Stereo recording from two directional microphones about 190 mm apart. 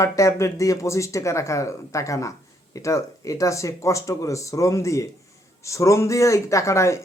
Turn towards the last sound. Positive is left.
turn(degrees=15)  # may be behind; listen again after turning